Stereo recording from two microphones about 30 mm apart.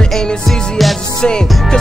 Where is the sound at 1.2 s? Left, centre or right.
Left.